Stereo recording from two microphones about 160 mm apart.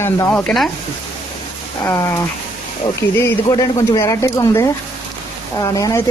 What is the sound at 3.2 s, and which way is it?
Speech, 20° left (ahead or behind).